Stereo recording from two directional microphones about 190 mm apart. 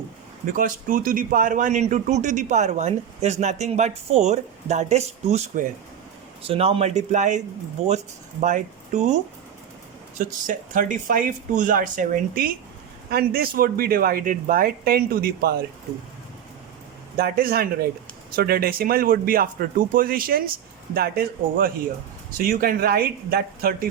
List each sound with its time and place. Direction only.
0.4 s a man's voice: 45° right (ahead or behind)
10.2 s speech: 45° right (ahead or behind)
17.2 s speech: 50° right (ahead or behind)